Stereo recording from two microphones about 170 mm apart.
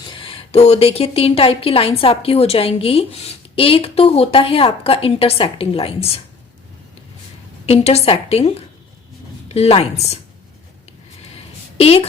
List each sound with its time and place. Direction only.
0.0 s speech: 30° left (ahead or behind)
7.7 s speech: 35° left (ahead or behind)
11.8 s speech: 35° left (ahead or behind)